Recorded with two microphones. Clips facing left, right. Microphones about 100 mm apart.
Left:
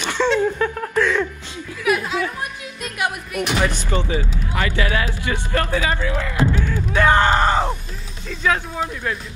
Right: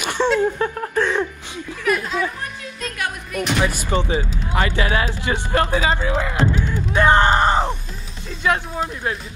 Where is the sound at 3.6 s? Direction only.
10° right (ahead or behind).